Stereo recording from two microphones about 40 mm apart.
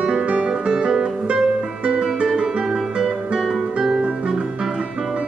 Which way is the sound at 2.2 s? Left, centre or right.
Centre.